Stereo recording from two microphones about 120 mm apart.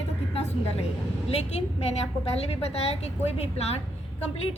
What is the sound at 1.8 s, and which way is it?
A woman's voice, 60° left (ahead or behind).